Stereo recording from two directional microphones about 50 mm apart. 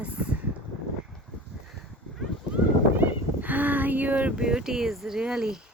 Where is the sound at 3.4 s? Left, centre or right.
Right.